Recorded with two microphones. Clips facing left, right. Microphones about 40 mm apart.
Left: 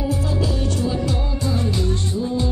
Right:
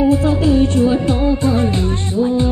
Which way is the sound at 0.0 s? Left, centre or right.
Right.